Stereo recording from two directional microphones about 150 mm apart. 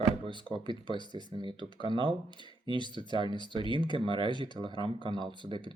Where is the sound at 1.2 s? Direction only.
35° right (ahead or behind).